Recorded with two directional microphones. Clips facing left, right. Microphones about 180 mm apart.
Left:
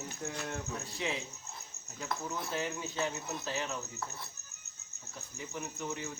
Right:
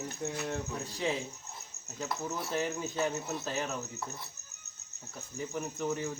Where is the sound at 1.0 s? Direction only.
40° right (ahead or behind).